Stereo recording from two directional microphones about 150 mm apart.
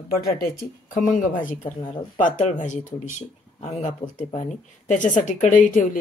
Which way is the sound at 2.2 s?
55° left (ahead or behind).